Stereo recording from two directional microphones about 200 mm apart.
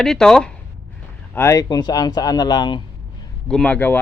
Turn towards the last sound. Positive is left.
turn(degrees=10)  # may be behind; listen again after turning